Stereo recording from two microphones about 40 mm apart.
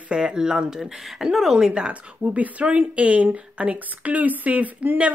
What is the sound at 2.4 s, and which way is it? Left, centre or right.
A woman's voice, right.